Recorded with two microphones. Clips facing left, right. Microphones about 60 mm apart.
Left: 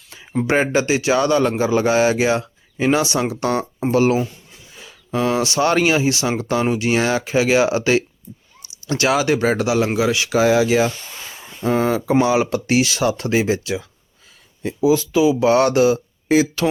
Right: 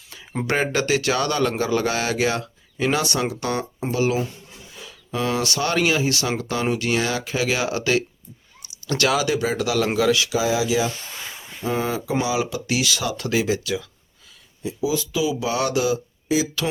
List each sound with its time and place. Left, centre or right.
0.4 s a man's voice: left
9.8 s a man's voice: centre
10.2 s speech: left
14.6 s speech: left